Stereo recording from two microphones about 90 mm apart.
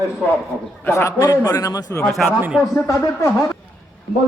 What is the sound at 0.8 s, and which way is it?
A man's voice, 30° left (ahead or behind).